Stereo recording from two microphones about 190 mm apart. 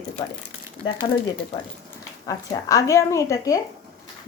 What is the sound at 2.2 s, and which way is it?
Speech, 15° left (ahead or behind).